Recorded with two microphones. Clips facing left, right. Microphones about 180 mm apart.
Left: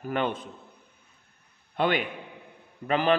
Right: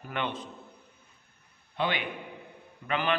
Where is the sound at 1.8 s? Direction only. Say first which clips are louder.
Left 5 dB; 45° left (ahead or behind).